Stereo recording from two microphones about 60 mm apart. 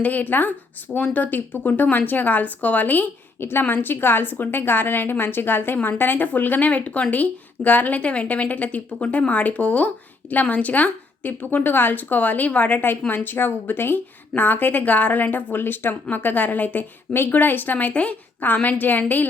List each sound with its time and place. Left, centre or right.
0.0 s a woman's voice: left